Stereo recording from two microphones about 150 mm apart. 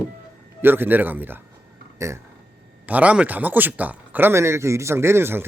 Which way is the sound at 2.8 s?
10° right (ahead or behind).